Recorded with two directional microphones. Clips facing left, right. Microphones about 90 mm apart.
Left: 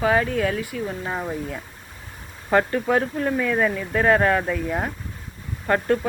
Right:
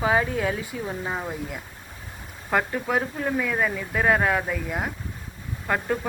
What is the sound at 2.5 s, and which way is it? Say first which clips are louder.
Speech: left 5 dB; 5° right (ahead or behind).